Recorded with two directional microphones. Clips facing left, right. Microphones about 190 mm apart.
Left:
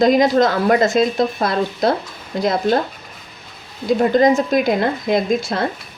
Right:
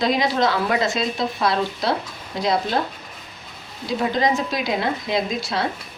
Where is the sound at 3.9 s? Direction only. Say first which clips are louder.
Left 7 dB; 50° left (ahead or behind).